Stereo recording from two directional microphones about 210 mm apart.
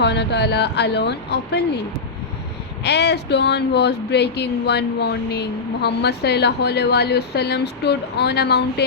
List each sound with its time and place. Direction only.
0.0 s speech: 55° left (ahead or behind)
2.8 s speech: 55° left (ahead or behind)